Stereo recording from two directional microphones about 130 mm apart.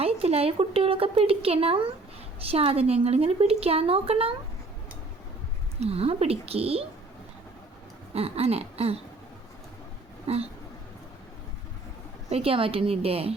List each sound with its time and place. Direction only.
0.0 s a woman's voice: 50° right (ahead or behind)
5.8 s a woman's voice: 50° right (ahead or behind)
8.1 s a woman's voice: 50° right (ahead or behind)
10.2 s a woman's voice: 50° right (ahead or behind)
12.3 s a woman's voice: 45° right (ahead or behind)